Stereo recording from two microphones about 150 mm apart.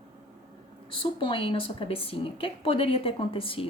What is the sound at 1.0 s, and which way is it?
Speech, 35° left (ahead or behind).